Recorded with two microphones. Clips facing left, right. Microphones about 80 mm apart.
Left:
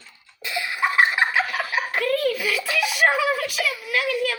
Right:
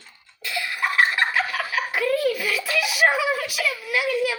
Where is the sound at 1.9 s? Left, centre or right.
Centre.